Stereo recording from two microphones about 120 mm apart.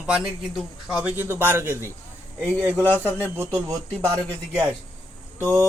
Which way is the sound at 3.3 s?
20° right (ahead or behind).